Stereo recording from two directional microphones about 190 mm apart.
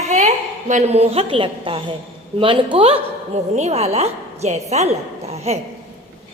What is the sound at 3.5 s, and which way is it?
Music, 35° right (ahead or behind).